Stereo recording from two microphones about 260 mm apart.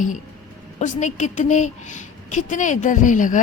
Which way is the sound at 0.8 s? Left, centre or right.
Left.